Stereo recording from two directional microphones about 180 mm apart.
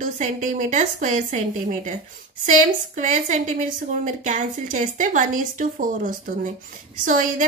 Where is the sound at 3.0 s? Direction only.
45° right (ahead or behind).